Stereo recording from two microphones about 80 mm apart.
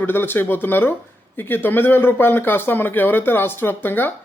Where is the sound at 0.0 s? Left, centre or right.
Left.